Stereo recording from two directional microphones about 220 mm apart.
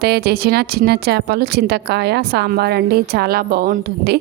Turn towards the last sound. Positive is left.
turn(degrees=-45)  # may be behind; listen again after turning